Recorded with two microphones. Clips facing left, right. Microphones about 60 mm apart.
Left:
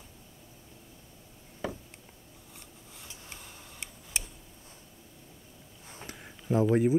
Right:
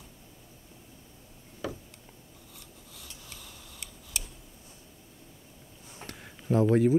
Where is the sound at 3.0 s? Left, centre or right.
Left.